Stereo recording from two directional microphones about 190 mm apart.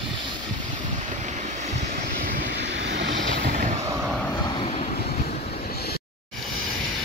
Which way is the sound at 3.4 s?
40° right (ahead or behind).